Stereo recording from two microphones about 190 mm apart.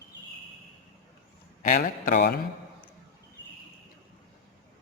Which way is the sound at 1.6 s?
45° left (ahead or behind).